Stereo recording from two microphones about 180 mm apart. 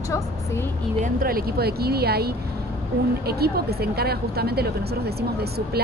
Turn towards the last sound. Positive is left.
turn(degrees=-60)  # may be behind; listen again after turning